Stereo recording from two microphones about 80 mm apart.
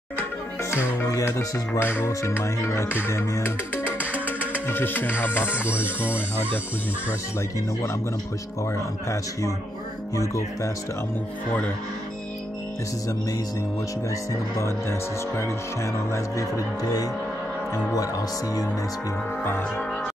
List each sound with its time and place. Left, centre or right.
0.6 s music: left
1.8 s speech: left
3.7 s music: centre
4.6 s speech: left
5.5 s music: centre
7.1 s speech: left
14.3 s speech: left